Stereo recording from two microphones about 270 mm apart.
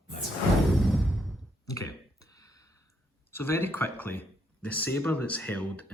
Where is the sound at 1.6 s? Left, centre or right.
Centre.